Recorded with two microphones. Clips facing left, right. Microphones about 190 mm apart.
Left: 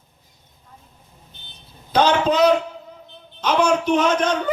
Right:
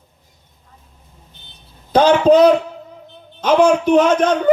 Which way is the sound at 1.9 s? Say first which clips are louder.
Right 7 dB; 55° right (ahead or behind).